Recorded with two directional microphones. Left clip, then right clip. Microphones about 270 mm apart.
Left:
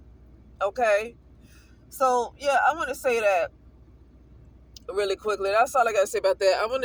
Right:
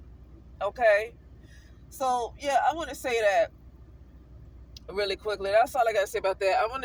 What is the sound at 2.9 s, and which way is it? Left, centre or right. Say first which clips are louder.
Speech: left 2 dB; left.